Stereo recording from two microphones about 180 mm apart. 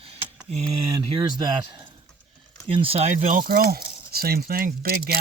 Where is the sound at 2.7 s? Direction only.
30° right (ahead or behind).